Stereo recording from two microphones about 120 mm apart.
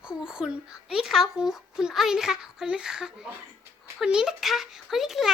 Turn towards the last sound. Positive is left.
turn(degrees=0)  # may be behind; listen again after turning